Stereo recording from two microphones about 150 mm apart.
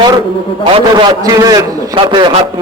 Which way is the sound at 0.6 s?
30° right (ahead or behind).